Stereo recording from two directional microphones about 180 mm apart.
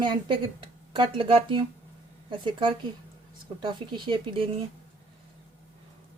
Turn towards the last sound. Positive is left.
turn(degrees=-30)  # may be behind; listen again after turning